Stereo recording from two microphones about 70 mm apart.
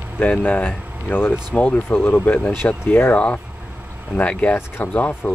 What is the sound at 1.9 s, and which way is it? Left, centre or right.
Speech, left.